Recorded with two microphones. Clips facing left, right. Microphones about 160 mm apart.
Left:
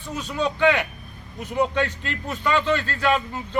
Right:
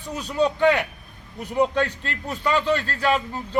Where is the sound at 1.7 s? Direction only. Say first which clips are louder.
Right 1 dB; 40° right (ahead or behind).